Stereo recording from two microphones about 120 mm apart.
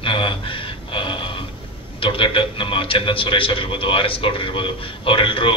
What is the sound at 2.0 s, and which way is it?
A man's voice, 45° left (ahead or behind).